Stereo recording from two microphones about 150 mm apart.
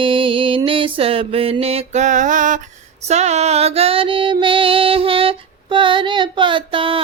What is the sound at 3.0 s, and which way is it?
Female singing, 50° right (ahead or behind).